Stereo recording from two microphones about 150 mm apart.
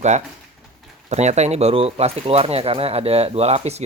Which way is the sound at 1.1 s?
50° right (ahead or behind).